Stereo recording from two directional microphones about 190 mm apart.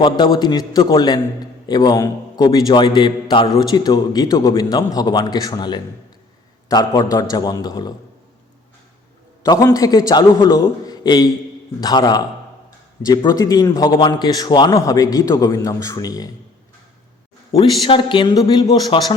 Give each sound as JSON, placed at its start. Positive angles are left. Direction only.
{"t": 0.0, "sound": "a man's voice", "side_deg": 20}
{"t": 9.4, "sound": "a man's voice", "side_deg": 20}
{"t": 17.5, "sound": "a man's voice", "side_deg": 30}